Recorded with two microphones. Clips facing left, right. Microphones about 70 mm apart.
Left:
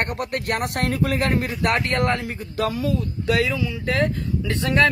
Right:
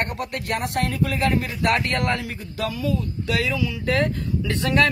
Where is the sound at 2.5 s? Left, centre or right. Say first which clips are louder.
Left 3 dB; left.